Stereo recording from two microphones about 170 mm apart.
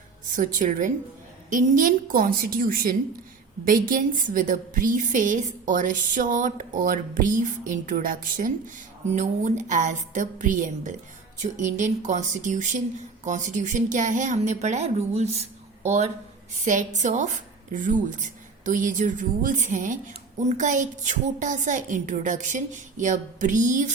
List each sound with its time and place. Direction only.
0.3 s a woman's voice: 50° right (ahead or behind)